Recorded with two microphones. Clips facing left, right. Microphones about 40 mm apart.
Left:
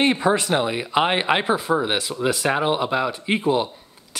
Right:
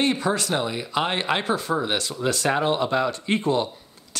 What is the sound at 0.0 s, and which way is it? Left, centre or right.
Speech, left.